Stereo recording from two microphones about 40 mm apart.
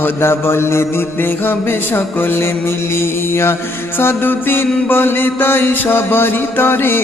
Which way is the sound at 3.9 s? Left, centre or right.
Left.